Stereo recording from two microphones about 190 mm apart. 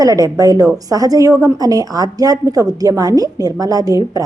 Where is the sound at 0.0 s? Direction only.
20° right (ahead or behind).